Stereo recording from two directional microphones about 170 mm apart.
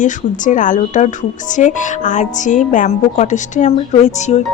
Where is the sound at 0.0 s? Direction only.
50° left (ahead or behind).